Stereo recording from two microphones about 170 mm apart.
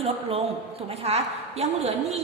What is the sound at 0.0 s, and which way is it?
A woman's voice, 35° right (ahead or behind).